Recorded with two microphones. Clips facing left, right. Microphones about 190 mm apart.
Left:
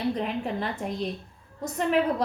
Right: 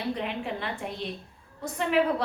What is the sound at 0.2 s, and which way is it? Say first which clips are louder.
A woman's voice: left 3 dB; 40° left (ahead or behind).